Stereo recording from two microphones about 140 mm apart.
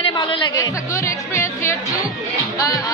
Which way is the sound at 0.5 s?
20° left (ahead or behind).